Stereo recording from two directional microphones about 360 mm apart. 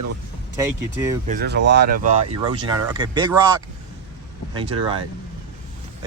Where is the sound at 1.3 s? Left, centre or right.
Right.